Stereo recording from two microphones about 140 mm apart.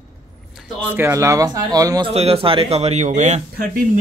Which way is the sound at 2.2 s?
45° right (ahead or behind).